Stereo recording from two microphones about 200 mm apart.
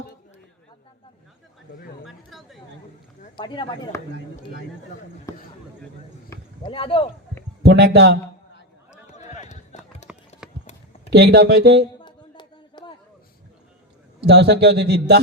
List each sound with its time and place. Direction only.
2.0 s a sound: centre (ahead or behind)
3.3 s speech: 25° left (ahead or behind)
5.3 s speech: 15° left (ahead or behind)
7.6 s a man's voice: 55° right (ahead or behind)
8.9 s a sound: 35° left (ahead or behind)
10.0 s run: 35° left (ahead or behind)
11.1 s a man's voice: 55° right (ahead or behind)
11.9 s a sound: 20° left (ahead or behind)
14.3 s a man's voice: 55° right (ahead or behind)